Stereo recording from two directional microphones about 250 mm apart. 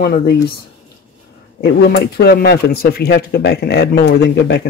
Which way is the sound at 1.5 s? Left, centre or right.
Left.